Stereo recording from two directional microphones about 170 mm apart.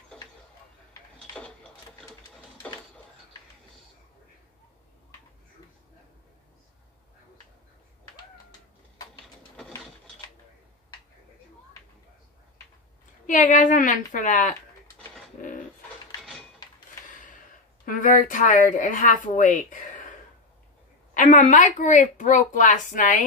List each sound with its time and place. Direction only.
13.3 s a woman's voice: 50° left (ahead or behind)
16.2 s a sound: 5° left (ahead or behind)
17.8 s a woman's voice: 50° left (ahead or behind)